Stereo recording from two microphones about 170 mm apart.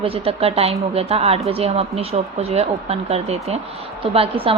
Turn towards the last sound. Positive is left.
turn(degrees=-35)  # may be behind; listen again after turning